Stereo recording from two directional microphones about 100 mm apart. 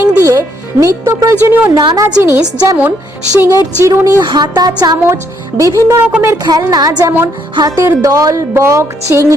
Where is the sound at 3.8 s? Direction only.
30° right (ahead or behind).